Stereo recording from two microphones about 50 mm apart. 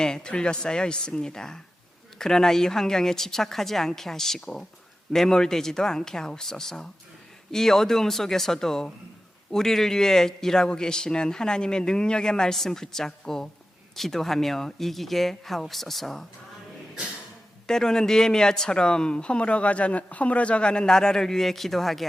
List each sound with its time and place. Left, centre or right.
0.0 s speech: centre
17.7 s speech: centre